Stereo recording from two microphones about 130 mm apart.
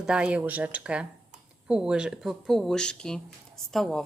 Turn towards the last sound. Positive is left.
turn(degrees=0)  # may be behind; listen again after turning